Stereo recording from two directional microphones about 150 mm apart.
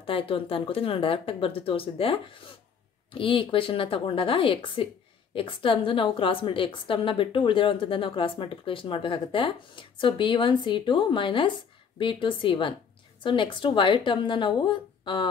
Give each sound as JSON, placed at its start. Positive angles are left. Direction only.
{"t": 0.0, "sound": "a woman's voice", "side_deg": 35}